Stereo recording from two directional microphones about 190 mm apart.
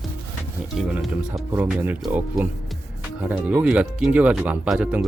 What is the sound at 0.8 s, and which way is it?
Speech, 5° right (ahead or behind).